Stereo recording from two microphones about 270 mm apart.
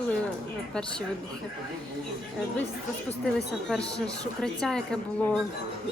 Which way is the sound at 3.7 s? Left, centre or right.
Centre.